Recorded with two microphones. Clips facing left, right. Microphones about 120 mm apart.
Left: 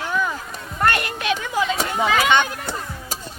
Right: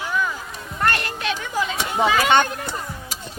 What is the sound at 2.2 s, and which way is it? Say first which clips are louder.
Speech: right 2 dB; 40° right (ahead or behind).